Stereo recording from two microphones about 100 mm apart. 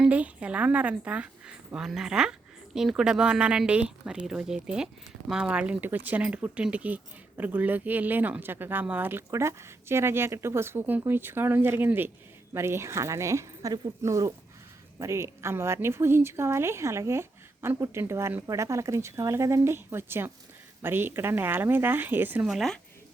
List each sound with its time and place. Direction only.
0.0 s a woman's voice: 15° right (ahead or behind)
22.4 s a woman's voice: centre (ahead or behind)